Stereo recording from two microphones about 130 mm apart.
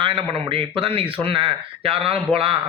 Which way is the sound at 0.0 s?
45° right (ahead or behind).